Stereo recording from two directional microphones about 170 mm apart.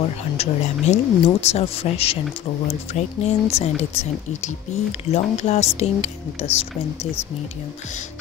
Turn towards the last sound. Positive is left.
turn(degrees=40)  # may be behind; listen again after turning